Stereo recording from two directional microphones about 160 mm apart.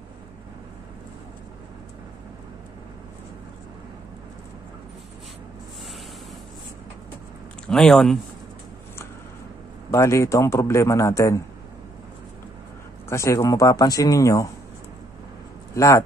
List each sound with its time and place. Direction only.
7.6 s speech: 5° left (ahead or behind)
9.9 s a man's voice: 20° left (ahead or behind)
13.1 s a man's voice: 20° left (ahead or behind)
15.7 s speech: 20° left (ahead or behind)